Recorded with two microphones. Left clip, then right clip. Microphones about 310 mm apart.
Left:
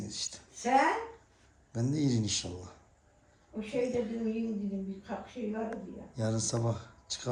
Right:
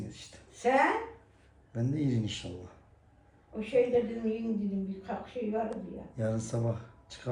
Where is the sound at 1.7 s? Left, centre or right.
Centre.